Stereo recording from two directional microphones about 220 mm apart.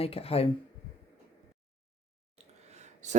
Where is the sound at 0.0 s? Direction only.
25° left (ahead or behind).